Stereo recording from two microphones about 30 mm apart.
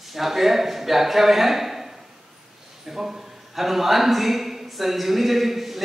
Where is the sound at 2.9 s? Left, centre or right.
Centre.